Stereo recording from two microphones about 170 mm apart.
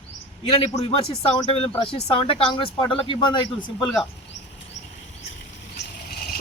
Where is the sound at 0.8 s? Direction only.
35° left (ahead or behind).